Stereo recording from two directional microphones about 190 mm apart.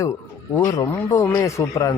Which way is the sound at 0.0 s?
15° left (ahead or behind).